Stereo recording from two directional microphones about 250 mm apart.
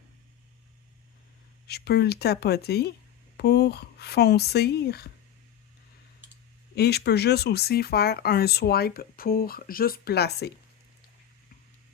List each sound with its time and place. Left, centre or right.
1.6 s speech: left
6.7 s speech: left